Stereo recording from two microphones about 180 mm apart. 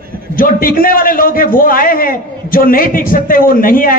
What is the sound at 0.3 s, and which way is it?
A man's voice, 50° left (ahead or behind).